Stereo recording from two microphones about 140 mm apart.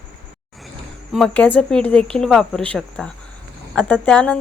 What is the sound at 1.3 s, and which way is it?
Speech, 10° left (ahead or behind).